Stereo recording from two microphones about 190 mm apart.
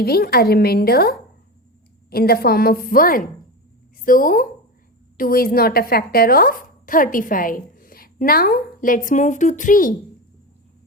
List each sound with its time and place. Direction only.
0.0 s a woman's voice: 55° left (ahead or behind)